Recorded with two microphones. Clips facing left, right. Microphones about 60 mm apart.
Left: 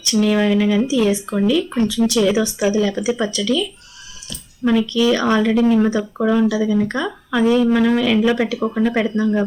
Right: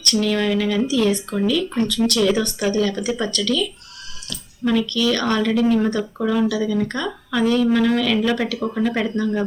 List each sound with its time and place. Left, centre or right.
0.0 s speech: centre